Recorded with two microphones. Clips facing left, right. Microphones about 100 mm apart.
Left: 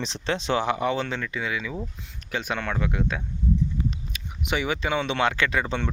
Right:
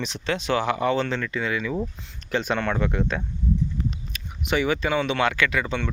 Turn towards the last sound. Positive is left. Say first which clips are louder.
# right 1 dB
turn(degrees=30)  # may be behind; listen again after turning